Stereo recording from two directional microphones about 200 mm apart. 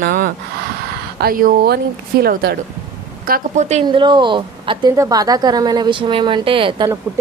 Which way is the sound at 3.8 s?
25° right (ahead or behind).